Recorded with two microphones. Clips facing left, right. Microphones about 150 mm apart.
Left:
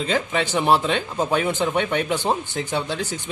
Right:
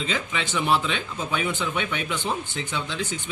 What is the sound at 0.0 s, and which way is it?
Speech, 45° left (ahead or behind).